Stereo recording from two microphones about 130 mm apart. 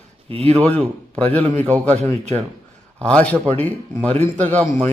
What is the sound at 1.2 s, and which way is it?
Speech, 10° left (ahead or behind).